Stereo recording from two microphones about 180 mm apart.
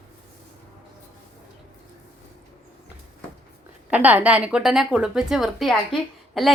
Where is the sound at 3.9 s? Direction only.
10° right (ahead or behind).